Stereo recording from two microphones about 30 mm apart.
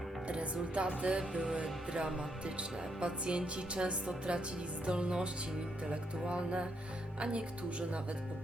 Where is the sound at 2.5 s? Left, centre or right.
Right.